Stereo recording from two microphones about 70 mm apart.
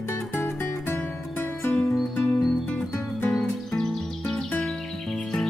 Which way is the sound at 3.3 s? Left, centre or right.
Centre.